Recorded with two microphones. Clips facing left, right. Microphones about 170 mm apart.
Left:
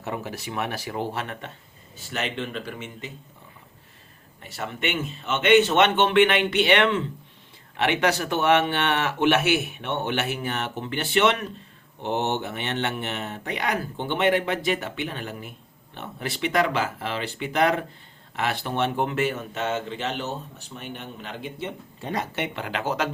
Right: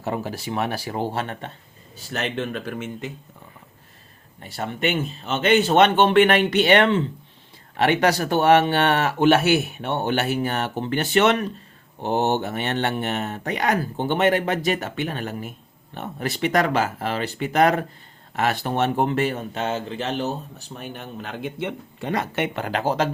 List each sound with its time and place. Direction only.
0.0 s speech: 35° right (ahead or behind); by 3.1 s 50° right (ahead or behind)
4.4 s speech: 35° right (ahead or behind); by 22.4 s 70° right (ahead or behind)
22.5 s speech: 40° right (ahead or behind)